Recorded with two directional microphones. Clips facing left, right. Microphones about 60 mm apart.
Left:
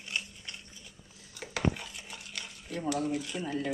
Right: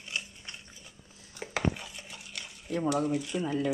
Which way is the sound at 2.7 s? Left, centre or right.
Right.